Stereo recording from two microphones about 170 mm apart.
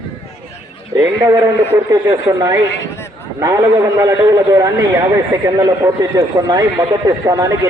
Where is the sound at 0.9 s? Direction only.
20° right (ahead or behind).